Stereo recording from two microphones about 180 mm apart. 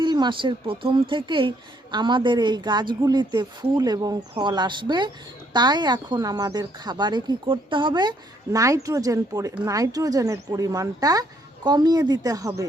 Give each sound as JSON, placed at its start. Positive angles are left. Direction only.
{"t": 0.0, "sound": "speech", "side_deg": -25}